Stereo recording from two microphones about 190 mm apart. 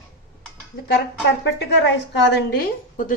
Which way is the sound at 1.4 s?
65° left (ahead or behind).